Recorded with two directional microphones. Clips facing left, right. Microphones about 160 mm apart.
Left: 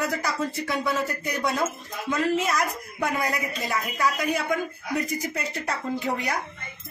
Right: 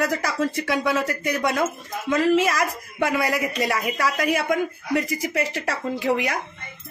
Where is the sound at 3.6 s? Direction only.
75° right (ahead or behind); by 6.3 s 90° right.